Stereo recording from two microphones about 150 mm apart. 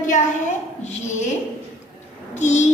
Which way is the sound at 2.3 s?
50° left (ahead or behind).